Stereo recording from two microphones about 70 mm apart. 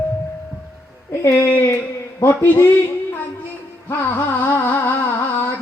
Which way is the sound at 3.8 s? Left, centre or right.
Left.